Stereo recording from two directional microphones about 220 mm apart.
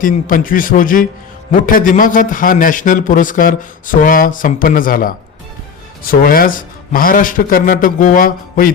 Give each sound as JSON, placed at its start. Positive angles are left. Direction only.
{"t": 0.0, "sound": "a man's voice", "side_deg": 40}